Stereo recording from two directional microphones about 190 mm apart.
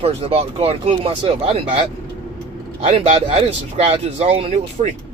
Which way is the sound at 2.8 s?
35° right (ahead or behind).